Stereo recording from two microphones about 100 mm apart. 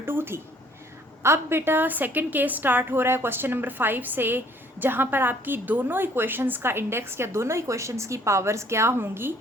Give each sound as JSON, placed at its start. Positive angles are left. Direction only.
{"t": 0.0, "sound": "a woman's voice", "side_deg": -20}